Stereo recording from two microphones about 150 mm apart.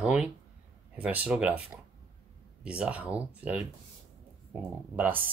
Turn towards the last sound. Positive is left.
turn(degrees=-15)  # may be behind; listen again after turning